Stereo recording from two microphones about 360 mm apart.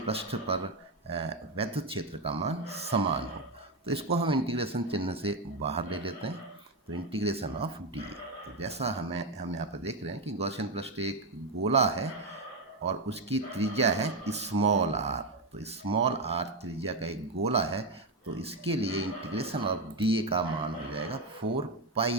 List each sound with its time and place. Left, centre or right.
0.1 s speech: centre